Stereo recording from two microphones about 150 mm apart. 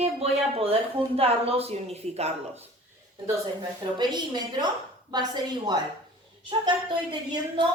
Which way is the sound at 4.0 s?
30° right (ahead or behind).